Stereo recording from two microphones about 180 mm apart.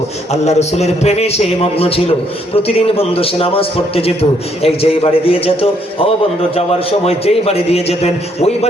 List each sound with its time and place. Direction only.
0.3 s a man's voice: 40° left (ahead or behind)